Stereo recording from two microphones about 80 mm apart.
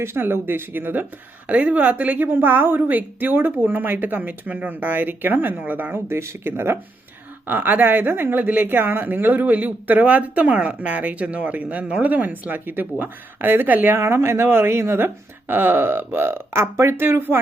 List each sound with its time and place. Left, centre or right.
0.0 s speech: right